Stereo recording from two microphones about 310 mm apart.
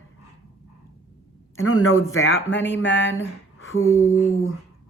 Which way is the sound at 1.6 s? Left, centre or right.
Left.